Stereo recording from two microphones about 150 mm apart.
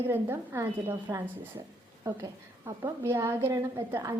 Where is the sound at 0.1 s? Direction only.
15° right (ahead or behind).